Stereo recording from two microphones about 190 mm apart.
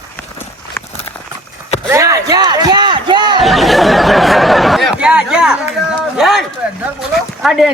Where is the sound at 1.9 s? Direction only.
15° right (ahead or behind).